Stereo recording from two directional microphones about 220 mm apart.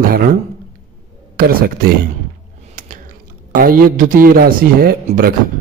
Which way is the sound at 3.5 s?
40° right (ahead or behind).